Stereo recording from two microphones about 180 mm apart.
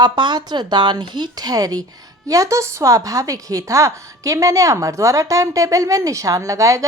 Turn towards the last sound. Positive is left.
turn(degrees=-20)  # may be behind; listen again after turning